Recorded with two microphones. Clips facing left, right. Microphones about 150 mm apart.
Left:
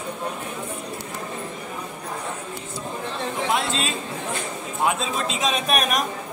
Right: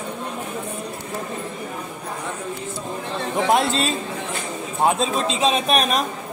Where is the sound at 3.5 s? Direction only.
35° right (ahead or behind).